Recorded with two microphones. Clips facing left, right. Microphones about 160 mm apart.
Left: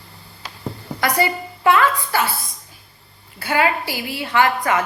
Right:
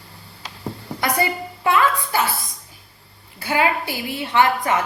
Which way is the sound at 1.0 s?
20° right (ahead or behind).